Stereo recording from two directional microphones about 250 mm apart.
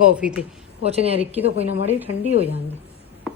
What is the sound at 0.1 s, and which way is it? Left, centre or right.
Speech, centre.